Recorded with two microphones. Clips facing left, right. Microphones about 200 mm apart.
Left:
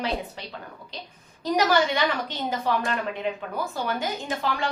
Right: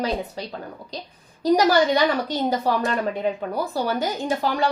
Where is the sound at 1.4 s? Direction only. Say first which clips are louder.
Right 5 dB; 35° right (ahead or behind).